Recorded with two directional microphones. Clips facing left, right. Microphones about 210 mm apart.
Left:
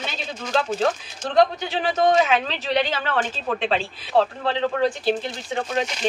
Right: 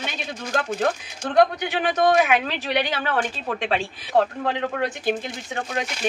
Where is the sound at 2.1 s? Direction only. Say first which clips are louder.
Even; 15° right (ahead or behind).